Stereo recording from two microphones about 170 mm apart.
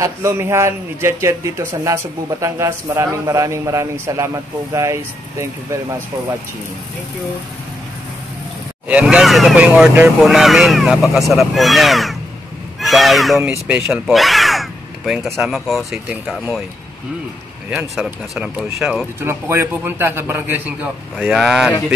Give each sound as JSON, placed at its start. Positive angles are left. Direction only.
{"t": 0.0, "sound": "a man's voice", "side_deg": -15}
{"t": 8.8, "sound": "speech", "side_deg": -5}
{"t": 17.6, "sound": "speech", "side_deg": -5}
{"t": 19.2, "sound": "a man's voice", "side_deg": -15}